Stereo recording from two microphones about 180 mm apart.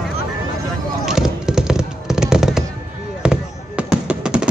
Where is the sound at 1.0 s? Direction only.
5° right (ahead or behind).